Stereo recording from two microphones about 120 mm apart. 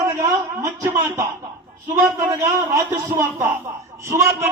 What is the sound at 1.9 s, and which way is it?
A man's voice, 20° right (ahead or behind).